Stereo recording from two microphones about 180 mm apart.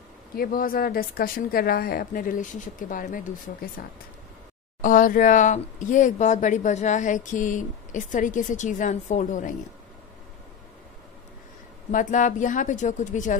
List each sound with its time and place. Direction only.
0.4 s speech: 55° left (ahead or behind)
3.8 s speech: 60° left (ahead or behind)
4.8 s speech: 50° left (ahead or behind)
11.9 s speech: 45° left (ahead or behind)